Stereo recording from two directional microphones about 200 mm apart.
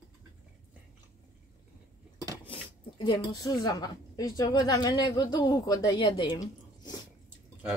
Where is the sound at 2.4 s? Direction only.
25° left (ahead or behind).